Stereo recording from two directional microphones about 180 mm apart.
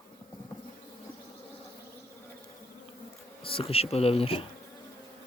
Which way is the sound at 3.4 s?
30° left (ahead or behind).